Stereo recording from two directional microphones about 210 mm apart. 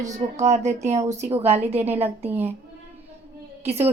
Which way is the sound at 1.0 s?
15° right (ahead or behind).